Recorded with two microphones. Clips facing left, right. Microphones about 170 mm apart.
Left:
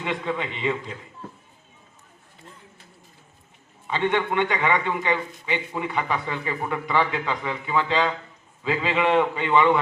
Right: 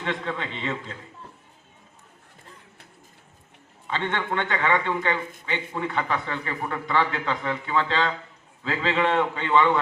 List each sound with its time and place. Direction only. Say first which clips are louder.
0.0 s a man's voice: left 2 dB; 15° left (ahead or behind)
3.8 s a man's voice: left 4 dB; 15° left (ahead or behind)